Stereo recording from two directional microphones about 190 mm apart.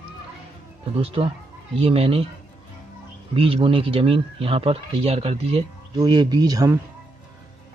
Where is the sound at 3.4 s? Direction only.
30° right (ahead or behind).